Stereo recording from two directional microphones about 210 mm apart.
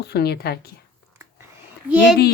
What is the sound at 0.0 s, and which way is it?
Speech, 50° left (ahead or behind).